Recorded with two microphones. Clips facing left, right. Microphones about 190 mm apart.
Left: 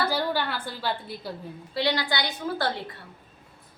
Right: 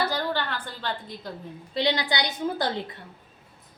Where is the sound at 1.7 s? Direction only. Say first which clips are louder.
Right 1 dB; 20° right (ahead or behind).